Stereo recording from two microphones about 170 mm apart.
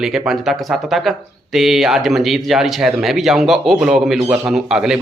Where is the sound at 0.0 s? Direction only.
5° right (ahead or behind).